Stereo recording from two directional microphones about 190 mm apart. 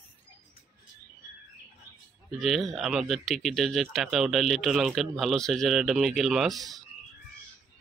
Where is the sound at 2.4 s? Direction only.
Centre (ahead or behind).